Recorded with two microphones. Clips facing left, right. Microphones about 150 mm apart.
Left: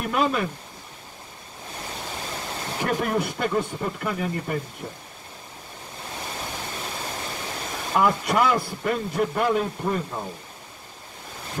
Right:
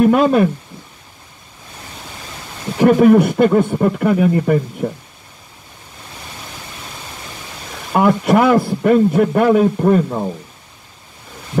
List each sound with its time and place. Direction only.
0.0 s speech: 55° right (ahead or behind)
2.8 s a man's voice: 70° right (ahead or behind)
7.9 s a man's voice: 55° right (ahead or behind)